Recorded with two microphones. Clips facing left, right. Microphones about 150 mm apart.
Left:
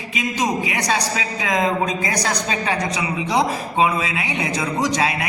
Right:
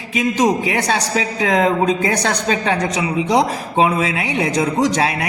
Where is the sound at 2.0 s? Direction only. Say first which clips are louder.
Right 4 dB; 30° right (ahead or behind).